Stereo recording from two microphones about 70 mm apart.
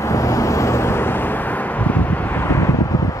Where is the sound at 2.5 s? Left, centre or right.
Left.